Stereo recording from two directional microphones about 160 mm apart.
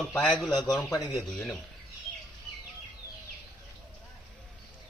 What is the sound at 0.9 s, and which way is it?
Speech, 25° left (ahead or behind).